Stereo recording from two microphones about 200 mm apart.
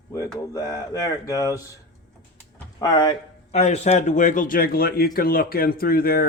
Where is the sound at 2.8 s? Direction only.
20° left (ahead or behind).